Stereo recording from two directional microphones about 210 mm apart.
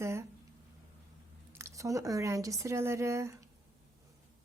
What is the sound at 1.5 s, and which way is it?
Speech, 15° right (ahead or behind).